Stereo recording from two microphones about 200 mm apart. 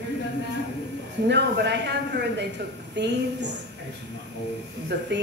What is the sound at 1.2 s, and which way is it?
Speech, 55° right (ahead or behind).